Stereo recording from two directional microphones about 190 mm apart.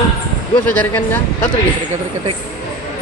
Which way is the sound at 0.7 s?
10° left (ahead or behind).